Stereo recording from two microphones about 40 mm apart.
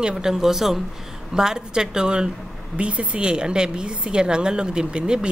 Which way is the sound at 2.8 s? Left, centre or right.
Right.